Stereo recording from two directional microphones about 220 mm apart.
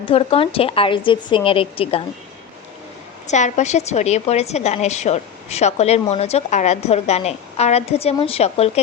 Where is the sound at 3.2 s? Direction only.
30° left (ahead or behind).